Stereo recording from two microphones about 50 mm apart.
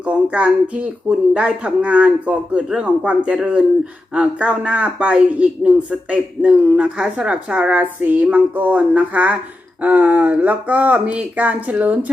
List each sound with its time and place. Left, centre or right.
0.0 s speech: right